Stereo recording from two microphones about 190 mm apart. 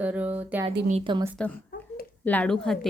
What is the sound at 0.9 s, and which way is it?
Speech, 25° right (ahead or behind).